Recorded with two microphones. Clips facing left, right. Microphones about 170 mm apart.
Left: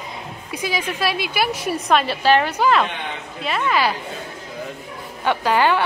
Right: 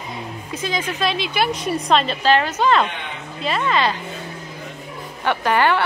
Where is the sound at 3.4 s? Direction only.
Centre (ahead or behind).